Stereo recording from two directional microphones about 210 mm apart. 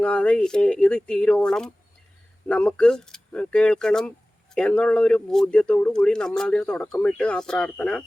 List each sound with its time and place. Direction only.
0.0 s speech: 5° left (ahead or behind)